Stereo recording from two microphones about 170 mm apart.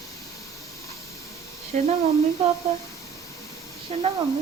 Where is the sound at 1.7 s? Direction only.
50° right (ahead or behind).